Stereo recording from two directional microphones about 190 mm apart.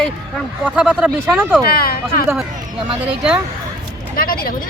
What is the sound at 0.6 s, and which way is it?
Speech, 5° right (ahead or behind).